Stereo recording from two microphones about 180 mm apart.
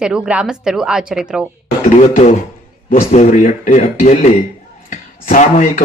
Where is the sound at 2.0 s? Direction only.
40° left (ahead or behind).